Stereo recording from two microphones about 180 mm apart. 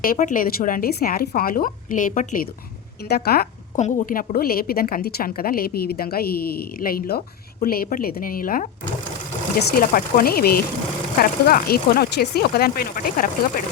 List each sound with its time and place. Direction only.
0.0 s speech: 50° left (ahead or behind)
3.1 s a woman's voice: 60° left (ahead or behind)
3.8 s a woman's voice: 45° left (ahead or behind)